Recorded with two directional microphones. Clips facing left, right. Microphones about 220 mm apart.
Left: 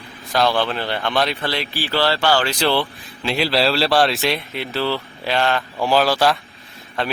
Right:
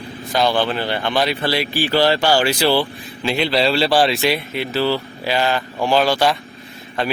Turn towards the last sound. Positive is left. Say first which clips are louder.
# right 2 dB
turn(degrees=0)  # may be behind; listen again after turning